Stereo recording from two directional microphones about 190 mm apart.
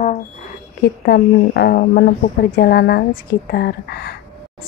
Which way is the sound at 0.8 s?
60° left (ahead or behind).